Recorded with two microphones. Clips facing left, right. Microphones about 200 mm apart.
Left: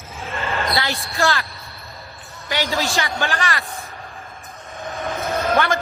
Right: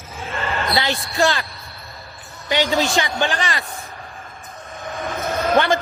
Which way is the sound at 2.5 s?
20° right (ahead or behind).